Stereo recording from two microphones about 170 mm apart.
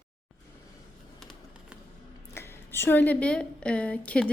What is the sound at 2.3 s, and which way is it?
A woman's voice, 15° left (ahead or behind).